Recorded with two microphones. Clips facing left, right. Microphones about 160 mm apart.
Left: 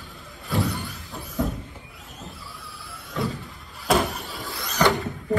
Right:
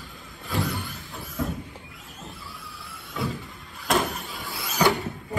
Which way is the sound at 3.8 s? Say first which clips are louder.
Left 3 dB; centre (ahead or behind).